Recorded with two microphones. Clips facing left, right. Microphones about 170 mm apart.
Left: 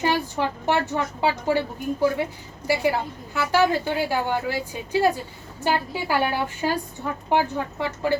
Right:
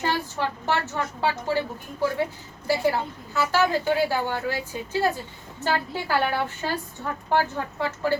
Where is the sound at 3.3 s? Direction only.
15° left (ahead or behind).